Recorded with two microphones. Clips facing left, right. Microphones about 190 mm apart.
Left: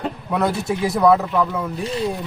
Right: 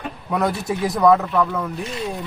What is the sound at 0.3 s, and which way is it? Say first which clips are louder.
A man's voice: even; 5° left (ahead or behind).